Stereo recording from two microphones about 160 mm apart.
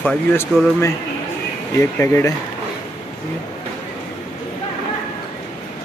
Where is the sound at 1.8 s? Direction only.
15° left (ahead or behind).